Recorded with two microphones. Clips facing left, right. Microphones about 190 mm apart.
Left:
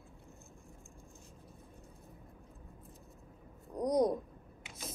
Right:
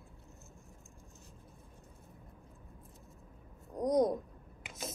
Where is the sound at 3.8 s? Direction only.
25° right (ahead or behind).